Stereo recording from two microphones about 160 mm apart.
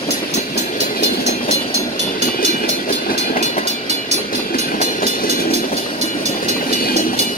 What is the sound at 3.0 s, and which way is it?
Train, 60° left (ahead or behind).